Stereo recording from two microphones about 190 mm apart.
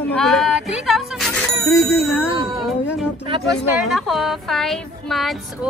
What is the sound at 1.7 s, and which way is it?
Speech, 15° left (ahead or behind).